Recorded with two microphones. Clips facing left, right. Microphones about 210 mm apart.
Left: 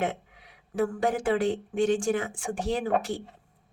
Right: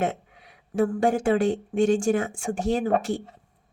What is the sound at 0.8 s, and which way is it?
Speech, 25° right (ahead or behind).